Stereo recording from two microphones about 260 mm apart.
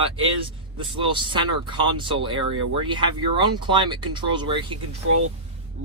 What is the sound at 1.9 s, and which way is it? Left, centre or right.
Speech, centre.